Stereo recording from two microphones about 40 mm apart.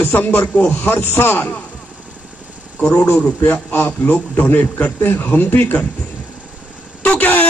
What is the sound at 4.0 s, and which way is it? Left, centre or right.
Speech, left.